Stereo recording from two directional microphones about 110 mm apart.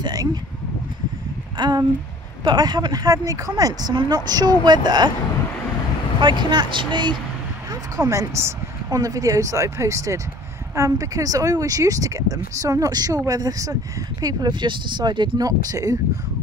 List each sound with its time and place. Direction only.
0.0 s speech: 35° right (ahead or behind)
1.6 s speech: 40° right (ahead or behind)
6.2 s speech: 45° right (ahead or behind)
8.0 s speech: 30° right (ahead or behind)